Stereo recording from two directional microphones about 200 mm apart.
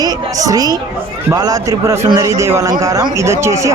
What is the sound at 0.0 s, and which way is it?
A woman's voice, 20° right (ahead or behind).